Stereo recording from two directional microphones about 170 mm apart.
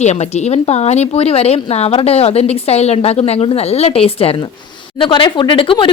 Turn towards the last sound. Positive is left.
turn(degrees=30)  # may be behind; listen again after turning